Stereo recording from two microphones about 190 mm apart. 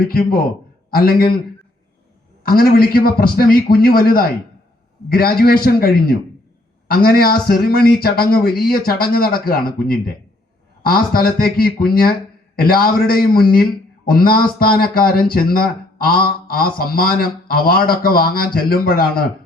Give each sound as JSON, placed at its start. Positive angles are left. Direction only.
{"t": 0.0, "sound": "a man's voice", "side_deg": 50}
{"t": 2.4, "sound": "a man's voice", "side_deg": 50}